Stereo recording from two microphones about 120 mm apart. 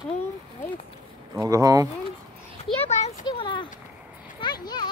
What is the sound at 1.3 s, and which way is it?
Speech, 30° right (ahead or behind).